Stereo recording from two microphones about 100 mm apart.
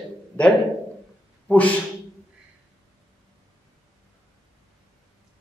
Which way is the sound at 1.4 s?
15° left (ahead or behind).